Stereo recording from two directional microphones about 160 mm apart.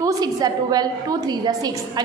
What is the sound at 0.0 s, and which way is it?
A woman's voice, 25° right (ahead or behind).